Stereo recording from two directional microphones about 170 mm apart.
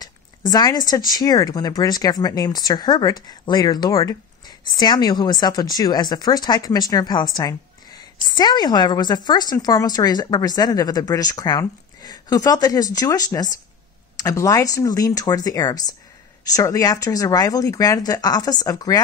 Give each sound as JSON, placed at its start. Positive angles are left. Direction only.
{"t": 0.0, "sound": "speech", "side_deg": 25}